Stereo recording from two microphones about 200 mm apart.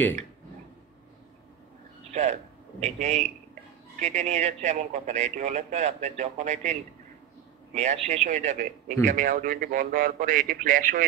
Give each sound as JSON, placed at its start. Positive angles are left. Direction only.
{"t": 2.8, "sound": "speech", "side_deg": -35}